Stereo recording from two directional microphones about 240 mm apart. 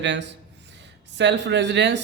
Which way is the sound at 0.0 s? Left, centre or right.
Right.